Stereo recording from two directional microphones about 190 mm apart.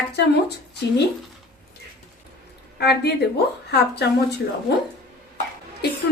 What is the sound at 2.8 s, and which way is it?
A woman's voice, 60° left (ahead or behind).